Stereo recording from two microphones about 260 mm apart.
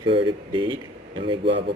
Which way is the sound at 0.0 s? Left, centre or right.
Centre.